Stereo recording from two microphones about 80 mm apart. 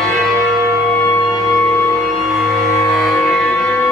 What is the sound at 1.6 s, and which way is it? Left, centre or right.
Music, left.